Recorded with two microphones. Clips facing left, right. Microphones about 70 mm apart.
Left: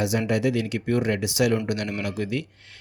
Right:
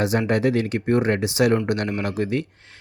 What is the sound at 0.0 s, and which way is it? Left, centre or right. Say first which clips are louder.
Speech: right 3 dB; right.